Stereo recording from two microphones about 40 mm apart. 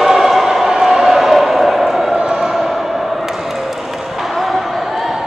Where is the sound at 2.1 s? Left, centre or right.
Right.